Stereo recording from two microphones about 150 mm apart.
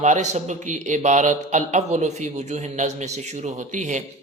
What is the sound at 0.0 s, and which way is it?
A man's voice, 50° right (ahead or behind).